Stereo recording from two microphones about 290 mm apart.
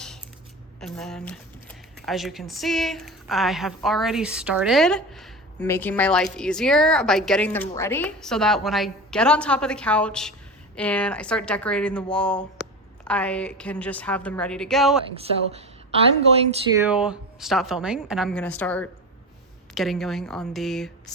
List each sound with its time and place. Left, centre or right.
0.8 s speech: centre
15.1 s speech: centre
16.8 s speech: centre